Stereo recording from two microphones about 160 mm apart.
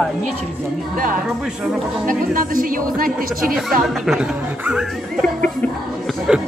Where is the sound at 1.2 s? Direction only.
5° right (ahead or behind).